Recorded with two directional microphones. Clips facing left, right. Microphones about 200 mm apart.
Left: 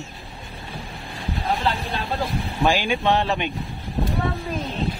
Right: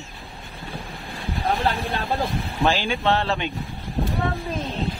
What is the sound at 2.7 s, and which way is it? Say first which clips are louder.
Speech: left 2 dB; 15° left (ahead or behind).